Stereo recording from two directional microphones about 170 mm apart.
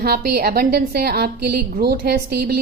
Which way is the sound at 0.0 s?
65° right (ahead or behind).